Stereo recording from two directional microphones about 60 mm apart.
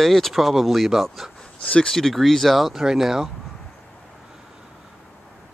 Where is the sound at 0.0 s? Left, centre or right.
Centre.